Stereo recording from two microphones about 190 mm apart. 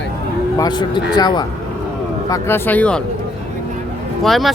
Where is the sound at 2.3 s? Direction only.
10° left (ahead or behind).